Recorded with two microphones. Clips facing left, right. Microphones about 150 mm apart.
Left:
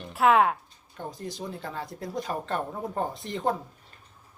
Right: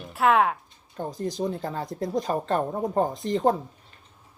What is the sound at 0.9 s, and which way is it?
Speech, 35° right (ahead or behind).